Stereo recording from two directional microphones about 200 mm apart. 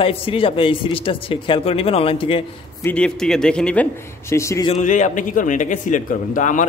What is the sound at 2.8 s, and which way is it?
A man's voice, 5° left (ahead or behind).